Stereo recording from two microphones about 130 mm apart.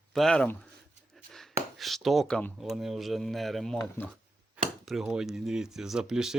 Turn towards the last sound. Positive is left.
turn(degrees=-5)  # may be behind; listen again after turning